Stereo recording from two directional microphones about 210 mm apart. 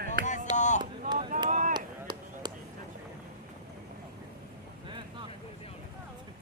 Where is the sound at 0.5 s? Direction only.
35° left (ahead or behind).